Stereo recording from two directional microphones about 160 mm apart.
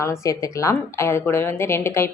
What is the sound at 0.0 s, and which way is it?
A woman's voice, 20° left (ahead or behind).